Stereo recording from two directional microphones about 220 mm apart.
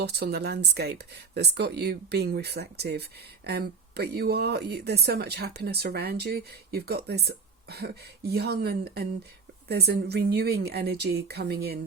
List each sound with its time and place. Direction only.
0.0 s speech: 45° right (ahead or behind)